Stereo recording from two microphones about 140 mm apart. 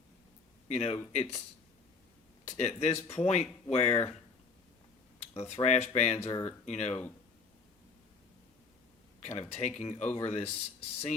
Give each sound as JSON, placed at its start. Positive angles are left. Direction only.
{"t": 0.7, "sound": "speech", "side_deg": 50}
{"t": 2.6, "sound": "speech", "side_deg": 50}
{"t": 5.3, "sound": "speech", "side_deg": 45}
{"t": 9.2, "sound": "speech", "side_deg": 50}